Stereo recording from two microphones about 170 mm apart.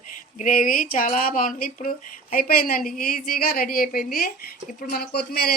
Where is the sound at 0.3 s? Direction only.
50° left (ahead or behind).